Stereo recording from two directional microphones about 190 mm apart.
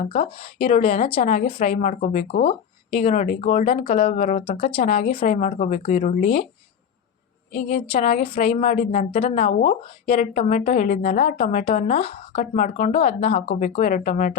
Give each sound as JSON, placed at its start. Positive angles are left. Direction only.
{"t": 0.1, "sound": "a woman's voice", "side_deg": 30}
{"t": 2.2, "sound": "a woman's voice", "side_deg": 50}
{"t": 2.5, "sound": "a woman's voice", "side_deg": 30}
{"t": 7.5, "sound": "a woman's voice", "side_deg": 50}
{"t": 8.2, "sound": "a woman's voice", "side_deg": 30}
{"t": 9.0, "sound": "a woman's voice", "side_deg": 35}